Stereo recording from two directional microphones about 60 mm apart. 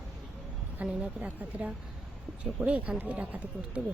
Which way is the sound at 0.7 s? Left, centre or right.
Right.